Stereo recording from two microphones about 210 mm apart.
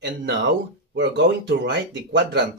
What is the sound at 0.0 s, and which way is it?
Speech, 55° right (ahead or behind).